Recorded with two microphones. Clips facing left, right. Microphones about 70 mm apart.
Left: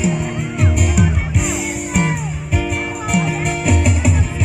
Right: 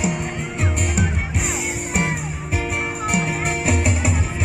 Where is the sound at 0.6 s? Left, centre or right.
Centre.